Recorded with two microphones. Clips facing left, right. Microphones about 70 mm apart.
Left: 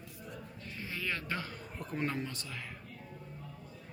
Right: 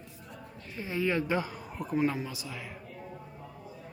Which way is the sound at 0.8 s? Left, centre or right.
Right.